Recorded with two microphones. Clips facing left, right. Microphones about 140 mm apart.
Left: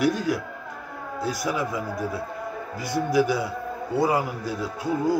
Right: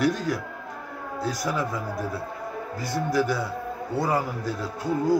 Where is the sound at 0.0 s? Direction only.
5° left (ahead or behind).